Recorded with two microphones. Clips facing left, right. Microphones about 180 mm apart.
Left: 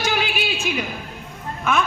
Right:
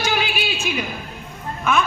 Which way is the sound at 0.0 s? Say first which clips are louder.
Even; 55° left (ahead or behind).